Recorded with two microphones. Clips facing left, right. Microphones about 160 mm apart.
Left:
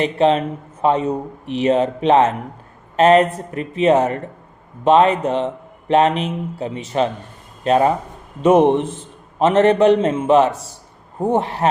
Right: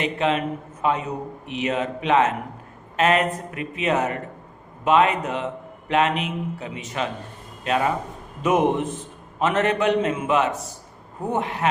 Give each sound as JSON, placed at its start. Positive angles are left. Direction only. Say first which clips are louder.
{"t": 0.0, "sound": "a man's voice", "louder": "left 7 dB", "side_deg": 35}